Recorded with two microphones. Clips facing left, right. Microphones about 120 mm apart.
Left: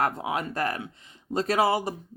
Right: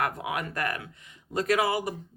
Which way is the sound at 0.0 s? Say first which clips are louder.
Left 3 dB; 30° left (ahead or behind).